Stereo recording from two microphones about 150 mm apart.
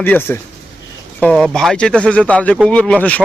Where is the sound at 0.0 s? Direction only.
15° left (ahead or behind).